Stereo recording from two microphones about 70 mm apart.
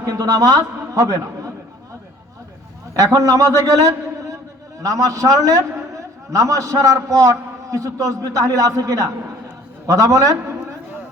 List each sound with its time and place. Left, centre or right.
0.0 s a man's voice: right
2.9 s a man's voice: right
4.8 s a man's voice: right